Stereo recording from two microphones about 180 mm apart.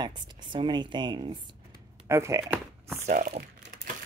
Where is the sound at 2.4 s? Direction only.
Centre (ahead or behind).